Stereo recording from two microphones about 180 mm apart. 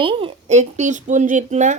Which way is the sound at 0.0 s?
30° right (ahead or behind).